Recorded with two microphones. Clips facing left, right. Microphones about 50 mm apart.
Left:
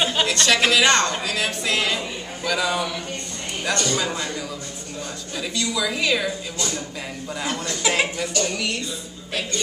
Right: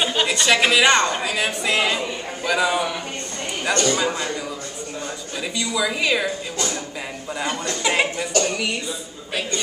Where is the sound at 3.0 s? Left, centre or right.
Right.